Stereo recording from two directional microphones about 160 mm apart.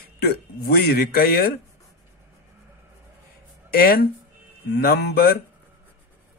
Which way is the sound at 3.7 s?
70° left (ahead or behind).